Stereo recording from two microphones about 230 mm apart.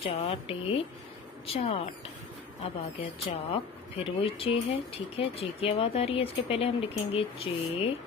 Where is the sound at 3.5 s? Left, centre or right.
Left.